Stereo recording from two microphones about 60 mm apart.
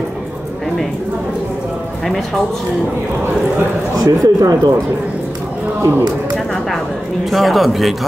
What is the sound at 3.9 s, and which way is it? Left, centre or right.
Speech, right.